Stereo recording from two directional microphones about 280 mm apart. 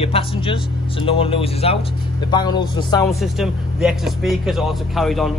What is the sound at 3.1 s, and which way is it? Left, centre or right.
Speech, centre.